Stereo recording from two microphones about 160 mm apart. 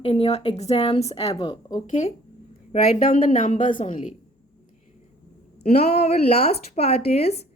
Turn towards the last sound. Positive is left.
turn(degrees=40)  # may be behind; listen again after turning